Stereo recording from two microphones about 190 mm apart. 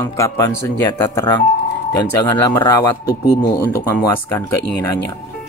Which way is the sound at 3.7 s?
15° left (ahead or behind).